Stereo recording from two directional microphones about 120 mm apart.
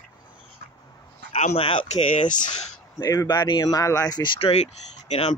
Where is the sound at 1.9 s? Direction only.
90° left.